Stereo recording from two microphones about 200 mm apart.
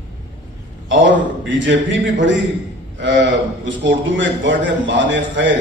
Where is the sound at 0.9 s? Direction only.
70° right (ahead or behind).